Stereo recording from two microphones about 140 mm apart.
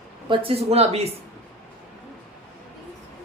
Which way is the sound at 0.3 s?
40° right (ahead or behind).